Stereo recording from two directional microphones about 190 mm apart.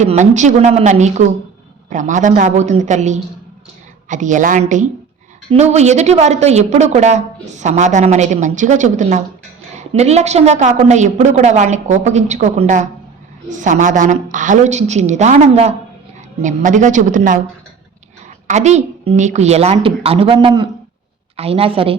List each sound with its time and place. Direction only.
0.0 s a woman's voice: 40° right (ahead or behind)
18.4 s a woman's voice: 35° right (ahead or behind)